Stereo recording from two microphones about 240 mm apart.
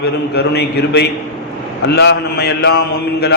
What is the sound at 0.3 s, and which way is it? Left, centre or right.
A man's voice, left.